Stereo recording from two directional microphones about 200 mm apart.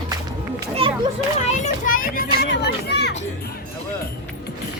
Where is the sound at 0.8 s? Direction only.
25° right (ahead or behind).